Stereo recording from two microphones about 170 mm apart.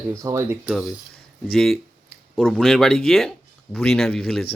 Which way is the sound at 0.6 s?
Centre (ahead or behind).